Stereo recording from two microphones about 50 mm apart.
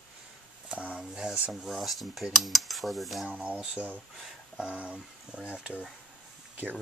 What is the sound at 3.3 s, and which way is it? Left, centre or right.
Speech, right.